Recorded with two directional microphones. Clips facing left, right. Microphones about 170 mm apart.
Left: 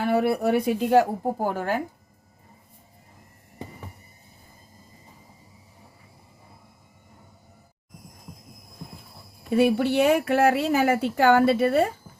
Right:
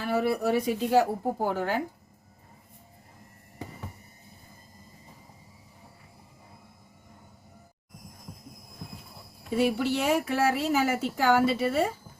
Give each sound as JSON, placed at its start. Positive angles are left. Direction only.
{"t": 0.0, "sound": "a woman's voice", "side_deg": 60}
{"t": 9.6, "sound": "a woman's voice", "side_deg": 60}